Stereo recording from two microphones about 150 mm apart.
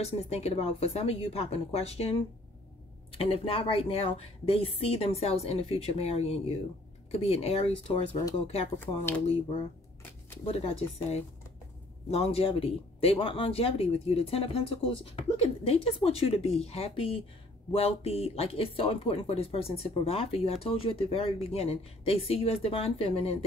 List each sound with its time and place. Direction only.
0.0 s speech: 45° left (ahead or behind)
9.2 s speech: 40° left (ahead or behind)